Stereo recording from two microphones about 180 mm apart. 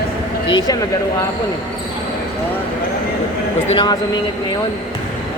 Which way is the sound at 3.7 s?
25° left (ahead or behind).